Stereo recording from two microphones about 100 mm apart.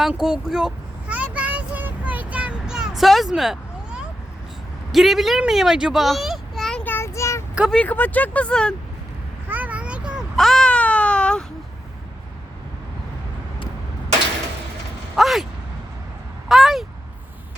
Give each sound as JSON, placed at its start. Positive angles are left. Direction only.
{"t": 0.0, "sound": "child singing", "side_deg": -5}
{"t": 4.9, "sound": "a child's voice", "side_deg": 0}
{"t": 6.8, "sound": "child singing", "side_deg": 25}
{"t": 7.7, "sound": "speech", "side_deg": 15}
{"t": 9.5, "sound": "a sound", "side_deg": -15}
{"t": 10.3, "sound": "cat", "side_deg": 5}
{"t": 15.1, "sound": "mechanisms", "side_deg": 0}
{"t": 16.5, "sound": "speech", "side_deg": 0}